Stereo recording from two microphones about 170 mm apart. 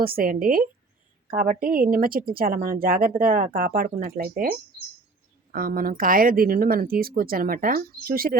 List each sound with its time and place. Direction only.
0.0 s speech: 60° right (ahead or behind)